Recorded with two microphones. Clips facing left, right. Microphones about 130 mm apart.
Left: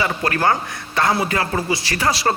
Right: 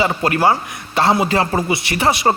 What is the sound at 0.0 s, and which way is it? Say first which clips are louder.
A man's voice: right 4 dB; 25° right (ahead or behind).